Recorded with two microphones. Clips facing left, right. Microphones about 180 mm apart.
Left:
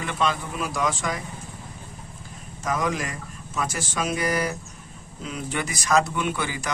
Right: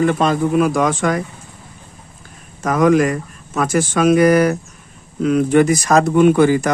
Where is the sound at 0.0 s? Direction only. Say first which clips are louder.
Right 11 dB; 45° right (ahead or behind).